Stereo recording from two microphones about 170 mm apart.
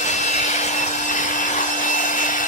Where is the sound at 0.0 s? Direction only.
45° left (ahead or behind).